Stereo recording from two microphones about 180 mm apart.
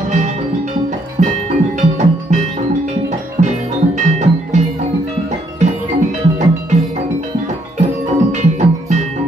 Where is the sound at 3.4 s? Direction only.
40° right (ahead or behind).